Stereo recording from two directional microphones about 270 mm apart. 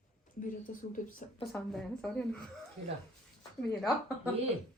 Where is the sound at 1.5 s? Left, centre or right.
Centre.